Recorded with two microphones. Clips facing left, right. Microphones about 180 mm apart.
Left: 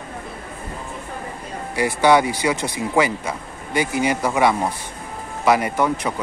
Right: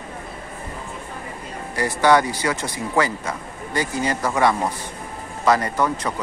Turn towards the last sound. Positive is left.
turn(degrees=10)  # may be behind; listen again after turning